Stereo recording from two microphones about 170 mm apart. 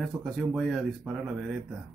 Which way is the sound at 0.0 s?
Centre (ahead or behind).